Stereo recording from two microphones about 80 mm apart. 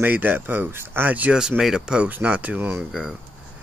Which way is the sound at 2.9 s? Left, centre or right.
Centre.